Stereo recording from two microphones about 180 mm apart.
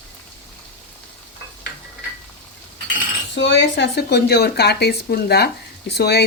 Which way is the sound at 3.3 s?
75° left (ahead or behind).